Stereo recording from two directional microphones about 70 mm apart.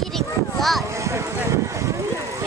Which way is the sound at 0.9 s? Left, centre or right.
Right.